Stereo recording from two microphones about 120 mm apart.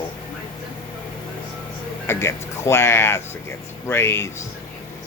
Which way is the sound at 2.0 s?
20° left (ahead or behind).